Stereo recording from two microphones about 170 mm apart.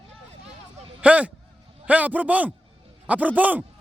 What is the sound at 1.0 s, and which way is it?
A man's voice, 10° right (ahead or behind).